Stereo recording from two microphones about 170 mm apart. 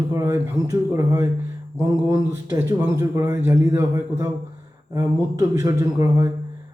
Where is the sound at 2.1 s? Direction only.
15° right (ahead or behind).